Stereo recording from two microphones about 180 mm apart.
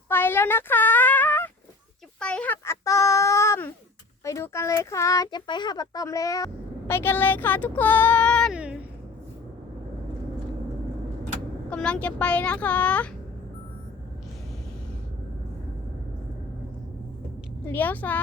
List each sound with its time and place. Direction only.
0.1 s speech: 10° left (ahead or behind)
2.1 s a sound: 5° left (ahead or behind)
4.2 s speech: 15° left (ahead or behind)
8.5 s a sound: 5° right (ahead or behind)
11.7 s speech: 5° left (ahead or behind)
17.7 s speech: 10° left (ahead or behind)